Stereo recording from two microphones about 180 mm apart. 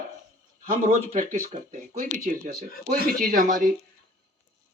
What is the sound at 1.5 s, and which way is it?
A man's voice, 40° right (ahead or behind).